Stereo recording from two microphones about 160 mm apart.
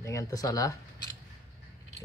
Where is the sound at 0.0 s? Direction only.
20° left (ahead or behind).